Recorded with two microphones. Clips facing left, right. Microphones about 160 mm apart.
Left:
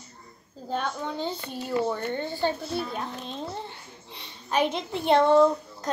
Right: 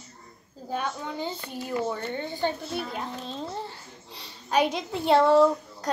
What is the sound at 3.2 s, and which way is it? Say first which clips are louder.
Babbling: right 1 dB; 35° right (ahead or behind).